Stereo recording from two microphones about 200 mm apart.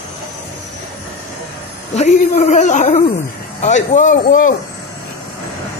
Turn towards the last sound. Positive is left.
turn(degrees=40)  # may be behind; listen again after turning